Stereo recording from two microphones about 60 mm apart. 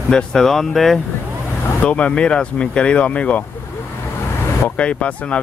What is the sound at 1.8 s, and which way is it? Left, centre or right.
Speech, centre.